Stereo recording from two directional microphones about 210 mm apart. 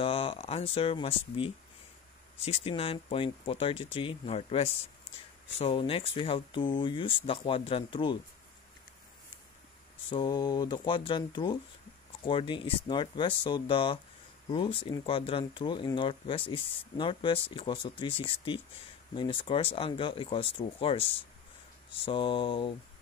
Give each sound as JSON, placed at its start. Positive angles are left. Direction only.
{"t": 0.0, "sound": "speech", "side_deg": 25}
{"t": 10.0, "sound": "speech", "side_deg": 20}